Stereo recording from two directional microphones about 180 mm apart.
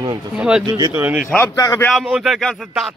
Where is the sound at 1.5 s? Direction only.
20° left (ahead or behind).